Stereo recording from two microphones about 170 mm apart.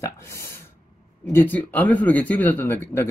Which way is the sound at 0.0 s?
15° left (ahead or behind).